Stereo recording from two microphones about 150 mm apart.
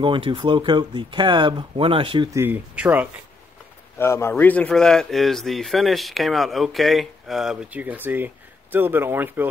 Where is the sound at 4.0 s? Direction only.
15° left (ahead or behind); by 9.5 s 15° right (ahead or behind).